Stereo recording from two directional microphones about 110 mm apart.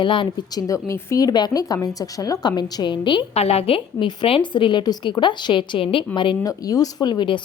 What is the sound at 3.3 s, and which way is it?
Speech, 65° left (ahead or behind).